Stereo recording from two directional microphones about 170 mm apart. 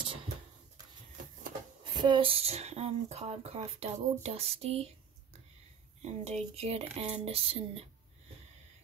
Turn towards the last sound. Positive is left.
turn(degrees=-35)  # may be behind; listen again after turning